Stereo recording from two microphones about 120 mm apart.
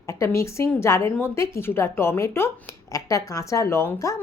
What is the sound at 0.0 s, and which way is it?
A woman's voice, 25° left (ahead or behind).